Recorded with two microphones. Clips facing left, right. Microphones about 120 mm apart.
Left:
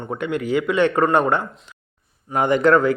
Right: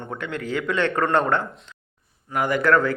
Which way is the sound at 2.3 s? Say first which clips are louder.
Left 4 dB; 25° left (ahead or behind).